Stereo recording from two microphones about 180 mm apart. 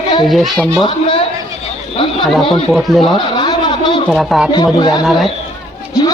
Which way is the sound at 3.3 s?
25° left (ahead or behind).